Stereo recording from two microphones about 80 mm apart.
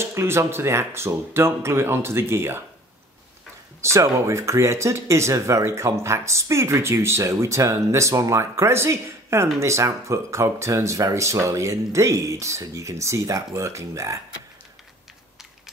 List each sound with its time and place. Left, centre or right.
0.0 s speech: right
3.8 s speech: right